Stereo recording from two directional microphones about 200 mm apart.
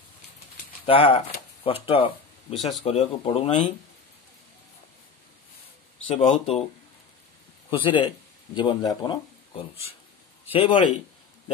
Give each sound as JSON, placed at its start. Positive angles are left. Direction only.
{"t": 0.8, "sound": "speech", "side_deg": 25}
{"t": 2.5, "sound": "speech", "side_deg": 0}
{"t": 2.8, "sound": "speech", "side_deg": 30}
{"t": 6.0, "sound": "speech", "side_deg": 30}
{"t": 7.8, "sound": "speech", "side_deg": 25}
{"t": 10.5, "sound": "speech", "side_deg": 25}